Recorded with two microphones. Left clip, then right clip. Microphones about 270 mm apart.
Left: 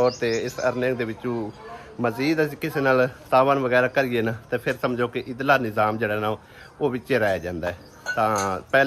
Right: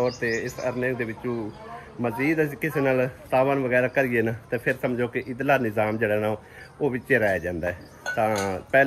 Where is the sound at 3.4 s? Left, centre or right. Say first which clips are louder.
Left 3 dB; left.